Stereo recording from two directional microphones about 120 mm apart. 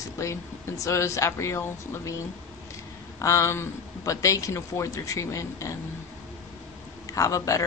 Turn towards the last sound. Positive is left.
turn(degrees=30)  # may be behind; listen again after turning